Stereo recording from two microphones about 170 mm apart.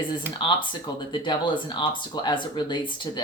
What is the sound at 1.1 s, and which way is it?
Speech, 25° left (ahead or behind).